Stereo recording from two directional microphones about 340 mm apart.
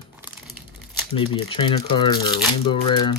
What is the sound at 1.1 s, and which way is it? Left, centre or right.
Speech, centre.